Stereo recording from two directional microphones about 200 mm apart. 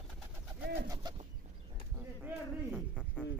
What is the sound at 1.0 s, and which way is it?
Chicken, 20° right (ahead or behind).